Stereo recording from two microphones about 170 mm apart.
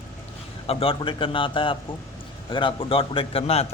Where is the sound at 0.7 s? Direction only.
35° left (ahead or behind).